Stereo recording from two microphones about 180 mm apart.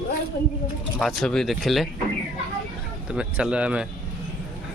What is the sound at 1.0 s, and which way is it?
Speech, centre (ahead or behind).